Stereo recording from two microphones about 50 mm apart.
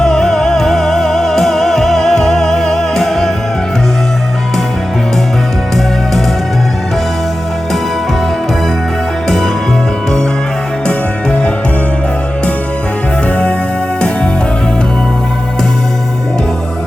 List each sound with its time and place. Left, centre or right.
0.0 s music: centre
10.8 s music: centre
13.2 s music: left